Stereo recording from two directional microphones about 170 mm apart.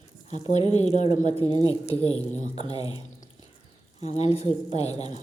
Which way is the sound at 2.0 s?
35° left (ahead or behind).